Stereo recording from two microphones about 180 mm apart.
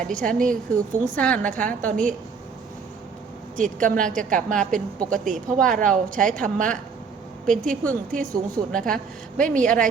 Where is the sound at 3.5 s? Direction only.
45° right (ahead or behind).